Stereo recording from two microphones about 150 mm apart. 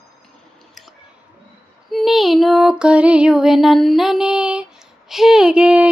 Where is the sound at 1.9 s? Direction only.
Centre (ahead or behind).